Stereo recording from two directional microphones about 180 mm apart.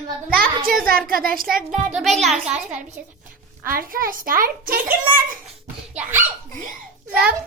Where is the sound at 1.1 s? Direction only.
55° right (ahead or behind).